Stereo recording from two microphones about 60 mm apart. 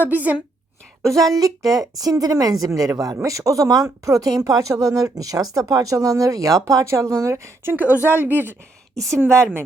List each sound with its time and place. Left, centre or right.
0.0 s a woman's voice: right
1.0 s speech: right
3.2 s speech: right
7.7 s a woman's voice: right
9.0 s a woman's voice: right
9.2 s a woman's voice: right